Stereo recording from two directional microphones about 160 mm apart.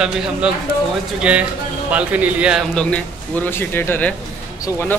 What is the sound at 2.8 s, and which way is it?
Speech, 10° left (ahead or behind).